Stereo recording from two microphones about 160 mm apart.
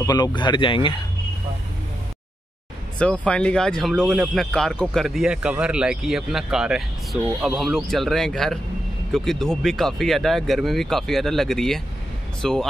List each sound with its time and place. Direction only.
0.0 s speech: 25° left (ahead or behind)
3.0 s speech: 5° left (ahead or behind)